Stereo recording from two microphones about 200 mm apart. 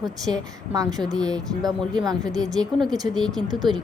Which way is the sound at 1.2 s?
5° left (ahead or behind).